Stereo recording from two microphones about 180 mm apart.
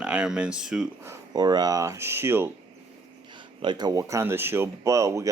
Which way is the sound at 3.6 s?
25° right (ahead or behind).